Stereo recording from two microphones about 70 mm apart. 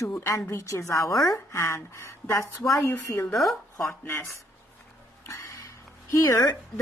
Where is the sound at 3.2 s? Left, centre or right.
Centre.